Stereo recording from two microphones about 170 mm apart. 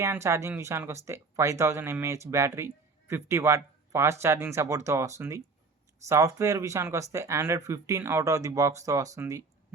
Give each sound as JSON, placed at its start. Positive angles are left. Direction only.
{"t": 0.0, "sound": "speech", "side_deg": -15}